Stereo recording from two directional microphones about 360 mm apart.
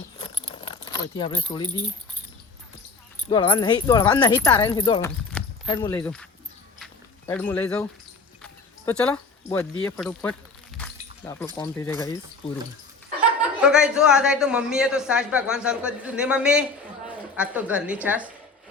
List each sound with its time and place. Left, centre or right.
0.2 s keys jangling: centre
3.2 s speech: centre
6.7 s a sound: centre
8.9 s a man's voice: centre
10.8 s a sound: centre
11.5 s speech: centre
13.4 s a man's voice: centre